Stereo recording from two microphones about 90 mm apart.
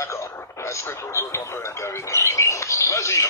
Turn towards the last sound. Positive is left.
turn(degrees=35)  # may be behind; listen again after turning